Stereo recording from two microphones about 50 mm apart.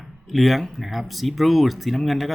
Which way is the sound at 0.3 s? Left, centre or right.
Centre.